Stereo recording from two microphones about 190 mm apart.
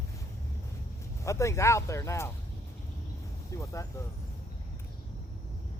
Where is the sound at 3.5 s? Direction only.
15° left (ahead or behind).